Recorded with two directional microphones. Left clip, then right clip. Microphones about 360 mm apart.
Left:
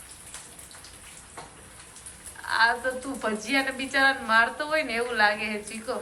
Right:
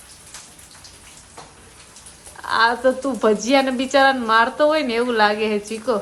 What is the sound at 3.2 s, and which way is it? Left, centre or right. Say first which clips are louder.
A woman's voice: right 10 dB; centre.